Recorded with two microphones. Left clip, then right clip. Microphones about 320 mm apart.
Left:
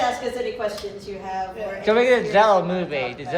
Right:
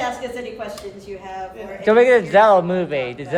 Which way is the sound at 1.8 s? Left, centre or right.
Right.